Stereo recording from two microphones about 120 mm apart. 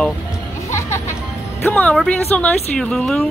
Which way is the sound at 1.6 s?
15° left (ahead or behind).